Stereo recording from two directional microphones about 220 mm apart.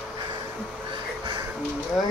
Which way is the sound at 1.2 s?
20° right (ahead or behind).